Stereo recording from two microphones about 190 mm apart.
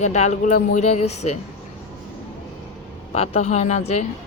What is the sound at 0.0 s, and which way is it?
Speech, 35° left (ahead or behind).